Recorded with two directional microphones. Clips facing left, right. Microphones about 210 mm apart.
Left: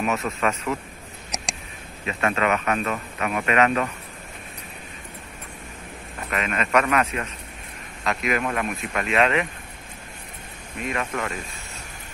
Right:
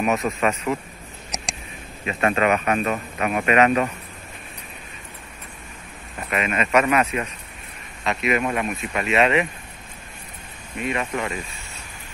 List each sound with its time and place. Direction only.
0.0 s speech: 15° right (ahead or behind)
1.3 s a sound: centre (ahead or behind)
2.0 s speech: 25° right (ahead or behind)
6.3 s speech: 10° right (ahead or behind)
10.8 s speech: 5° right (ahead or behind)